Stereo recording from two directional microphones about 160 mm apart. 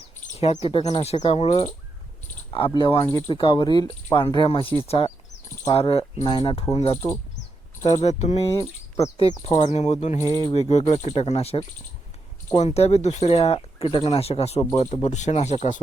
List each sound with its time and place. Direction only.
0.3 s speech: 40° left (ahead or behind)
2.6 s speech: 30° left (ahead or behind); by 15.8 s 45° left (ahead or behind)